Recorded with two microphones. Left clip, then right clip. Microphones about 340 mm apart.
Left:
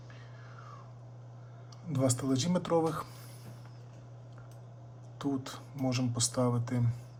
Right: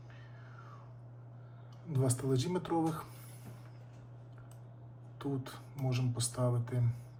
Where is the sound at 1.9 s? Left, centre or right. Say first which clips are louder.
Left 4 dB; centre.